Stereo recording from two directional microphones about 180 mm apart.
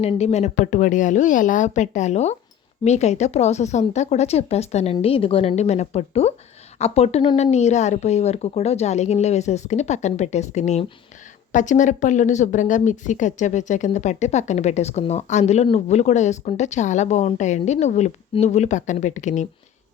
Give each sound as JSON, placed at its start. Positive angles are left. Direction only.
{"t": 0.0, "sound": "speech", "side_deg": 35}
{"t": 7.5, "sound": "speech", "side_deg": 40}